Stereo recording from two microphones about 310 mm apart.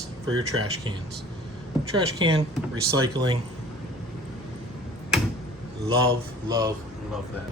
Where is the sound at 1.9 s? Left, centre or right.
Centre.